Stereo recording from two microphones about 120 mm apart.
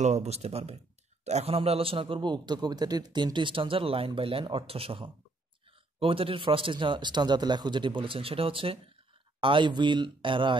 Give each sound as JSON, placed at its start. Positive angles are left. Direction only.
{"t": 0.0, "sound": "a man's voice", "side_deg": -65}